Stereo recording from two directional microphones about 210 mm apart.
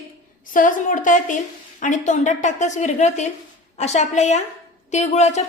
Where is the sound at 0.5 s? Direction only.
40° left (ahead or behind).